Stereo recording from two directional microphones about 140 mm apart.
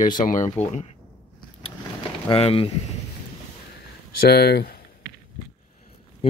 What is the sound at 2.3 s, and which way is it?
Speech, 40° left (ahead or behind).